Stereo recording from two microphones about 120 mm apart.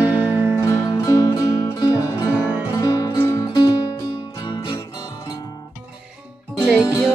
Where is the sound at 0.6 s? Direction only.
25° left (ahead or behind).